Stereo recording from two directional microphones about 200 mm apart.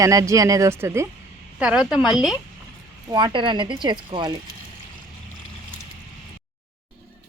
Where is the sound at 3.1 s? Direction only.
25° right (ahead or behind).